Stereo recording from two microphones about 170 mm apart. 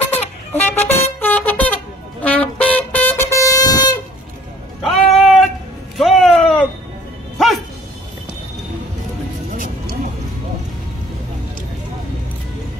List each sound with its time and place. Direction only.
0.5 s vehicle: 10° left (ahead or behind)
2.2 s vehicle horn: 10° left (ahead or behind)
4.8 s cat: centre (ahead or behind)
5.9 s a sound: centre (ahead or behind)
7.3 s music: centre (ahead or behind)